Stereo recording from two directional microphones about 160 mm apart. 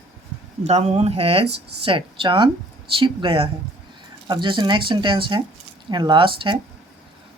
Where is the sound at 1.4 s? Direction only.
90° right.